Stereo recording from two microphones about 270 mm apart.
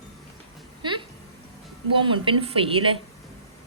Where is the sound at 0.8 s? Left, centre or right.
Centre.